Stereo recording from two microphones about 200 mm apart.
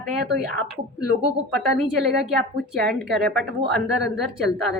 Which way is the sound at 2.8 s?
Centre (ahead or behind).